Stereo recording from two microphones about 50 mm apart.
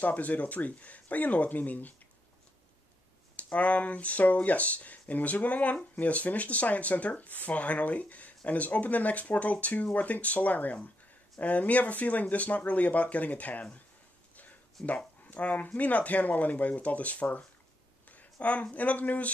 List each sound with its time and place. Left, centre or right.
0.0 s speech: left
3.3 s speech: left
14.8 s speech: centre
15.2 s speech: left